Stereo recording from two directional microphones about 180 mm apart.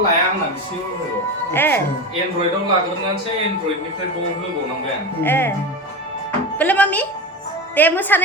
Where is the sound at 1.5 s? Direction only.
10° left (ahead or behind).